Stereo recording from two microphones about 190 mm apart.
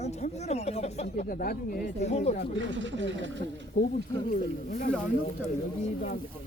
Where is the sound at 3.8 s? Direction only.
50° left (ahead or behind).